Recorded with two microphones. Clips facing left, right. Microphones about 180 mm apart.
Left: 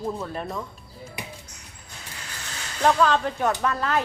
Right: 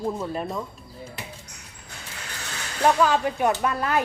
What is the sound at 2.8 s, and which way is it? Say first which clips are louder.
Speech: even; 10° right (ahead or behind).